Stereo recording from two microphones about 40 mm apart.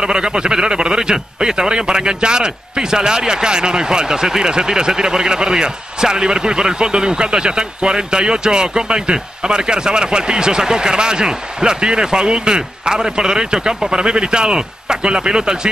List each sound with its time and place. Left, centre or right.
0.0 s speech: centre